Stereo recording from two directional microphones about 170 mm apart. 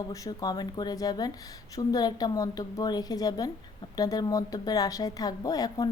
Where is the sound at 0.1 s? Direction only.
25° left (ahead or behind).